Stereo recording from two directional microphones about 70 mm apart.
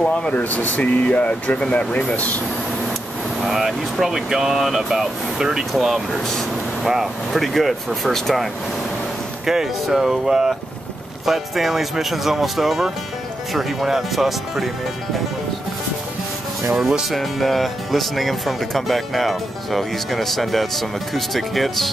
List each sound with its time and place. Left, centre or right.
0.0 s speech: centre
3.4 s speech: centre
9.5 s speech: centre
16.7 s speech: centre